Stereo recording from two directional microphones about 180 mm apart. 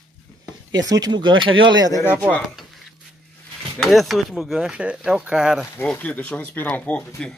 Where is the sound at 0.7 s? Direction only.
20° right (ahead or behind).